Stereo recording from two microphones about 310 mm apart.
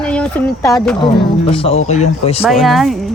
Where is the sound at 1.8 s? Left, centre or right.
Left.